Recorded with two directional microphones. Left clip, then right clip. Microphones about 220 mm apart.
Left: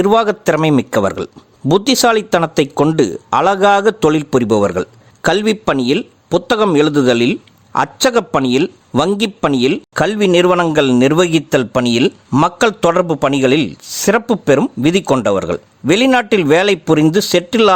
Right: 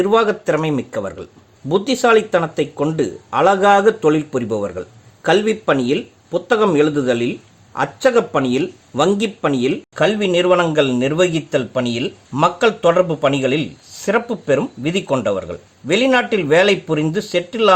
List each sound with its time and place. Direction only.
0.0 s speech: 40° left (ahead or behind)